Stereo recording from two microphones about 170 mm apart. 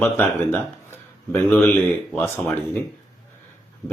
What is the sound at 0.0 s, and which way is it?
Speech, 10° left (ahead or behind).